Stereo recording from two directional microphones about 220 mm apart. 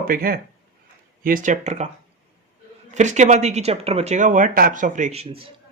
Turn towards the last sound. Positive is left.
turn(degrees=-25)  # may be behind; listen again after turning